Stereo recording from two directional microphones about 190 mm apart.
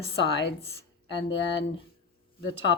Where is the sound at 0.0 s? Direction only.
65° left (ahead or behind).